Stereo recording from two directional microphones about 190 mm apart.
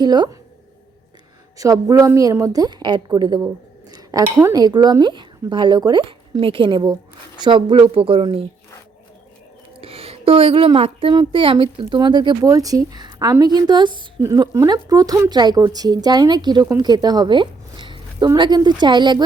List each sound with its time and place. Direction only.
0.0 s a woman's voice: 20° right (ahead or behind)
1.5 s a woman's voice: 20° right (ahead or behind)
9.8 s a woman's voice: 30° right (ahead or behind)